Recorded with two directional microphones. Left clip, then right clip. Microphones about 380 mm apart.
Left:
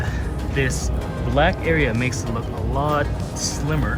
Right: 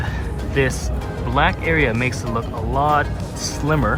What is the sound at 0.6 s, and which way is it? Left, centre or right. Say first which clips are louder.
Speech: right 4 dB; centre.